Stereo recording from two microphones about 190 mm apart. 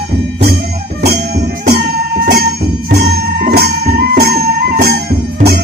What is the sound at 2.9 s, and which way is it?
Music, 55° right (ahead or behind).